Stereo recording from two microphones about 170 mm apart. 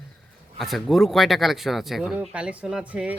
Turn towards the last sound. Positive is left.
turn(degrees=-5)  # may be behind; listen again after turning